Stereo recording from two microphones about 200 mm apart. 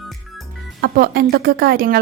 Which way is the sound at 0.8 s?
50° right (ahead or behind).